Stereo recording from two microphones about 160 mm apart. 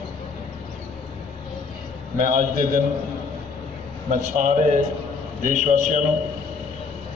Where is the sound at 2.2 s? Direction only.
50° right (ahead or behind).